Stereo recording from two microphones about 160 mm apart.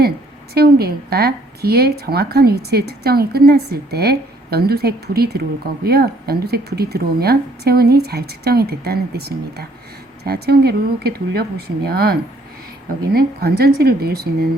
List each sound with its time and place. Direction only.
0.5 s speech: 80° right
13.1 s speech: 75° right (ahead or behind)